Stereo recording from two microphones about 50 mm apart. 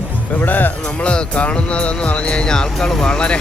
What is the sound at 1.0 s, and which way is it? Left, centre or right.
Speech, left.